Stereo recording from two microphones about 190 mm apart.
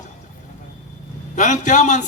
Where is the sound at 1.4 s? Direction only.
40° left (ahead or behind).